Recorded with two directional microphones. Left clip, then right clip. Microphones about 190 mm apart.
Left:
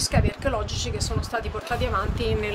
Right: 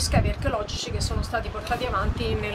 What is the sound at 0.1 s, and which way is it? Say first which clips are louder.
Speech: left 1 dB; 55° left (ahead or behind).